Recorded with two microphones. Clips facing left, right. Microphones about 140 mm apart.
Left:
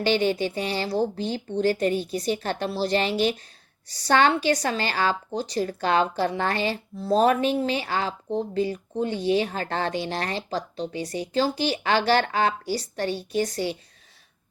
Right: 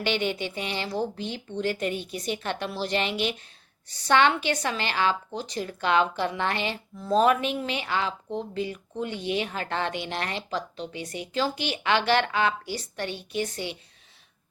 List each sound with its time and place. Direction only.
0.0 s a woman's voice: 35° left (ahead or behind)